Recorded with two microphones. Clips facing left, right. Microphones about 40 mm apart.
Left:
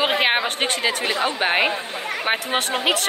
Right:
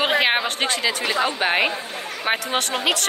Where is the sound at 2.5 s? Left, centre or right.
Centre.